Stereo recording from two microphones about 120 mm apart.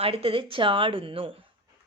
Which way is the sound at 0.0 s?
50° right (ahead or behind).